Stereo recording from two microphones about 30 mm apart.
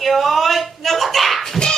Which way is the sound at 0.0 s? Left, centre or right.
Centre.